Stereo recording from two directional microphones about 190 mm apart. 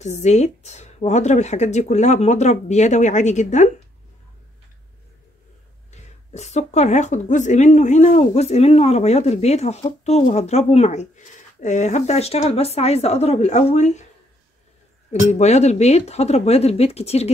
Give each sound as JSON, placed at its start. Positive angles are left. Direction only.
{"t": 0.0, "sound": "a woman's voice", "side_deg": 35}
{"t": 5.9, "sound": "a woman's voice", "side_deg": 35}
{"t": 15.3, "sound": "a woman's voice", "side_deg": 35}